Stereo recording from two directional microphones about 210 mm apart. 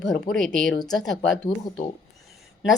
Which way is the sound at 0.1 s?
Centre (ahead or behind).